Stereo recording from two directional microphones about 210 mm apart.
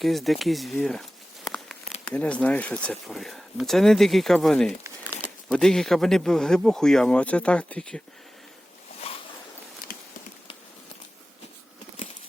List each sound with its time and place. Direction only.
0.0 s speech: centre (ahead or behind)
1.5 s tearing: centre (ahead or behind)
2.0 s speech: 5° left (ahead or behind)
9.0 s zipper: 30° left (ahead or behind)